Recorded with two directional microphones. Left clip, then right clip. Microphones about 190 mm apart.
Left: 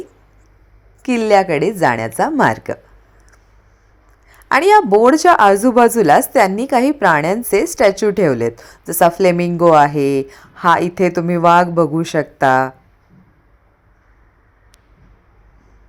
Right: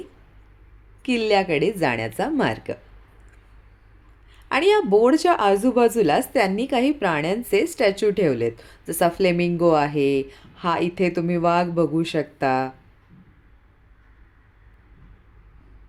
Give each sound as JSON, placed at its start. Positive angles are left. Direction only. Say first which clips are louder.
{"t": 1.1, "sound": "a woman's voice", "louder": "left 7 dB", "side_deg": 20}
{"t": 4.3, "sound": "a woman's voice", "louder": "left 8 dB", "side_deg": 15}